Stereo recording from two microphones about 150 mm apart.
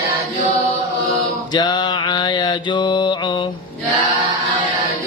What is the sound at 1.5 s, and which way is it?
Mantra, 30° left (ahead or behind).